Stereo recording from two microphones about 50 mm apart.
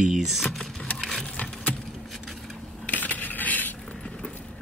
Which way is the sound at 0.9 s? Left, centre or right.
Centre.